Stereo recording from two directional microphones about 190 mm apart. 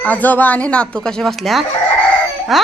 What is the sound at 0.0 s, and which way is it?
A woman's voice, 10° left (ahead or behind).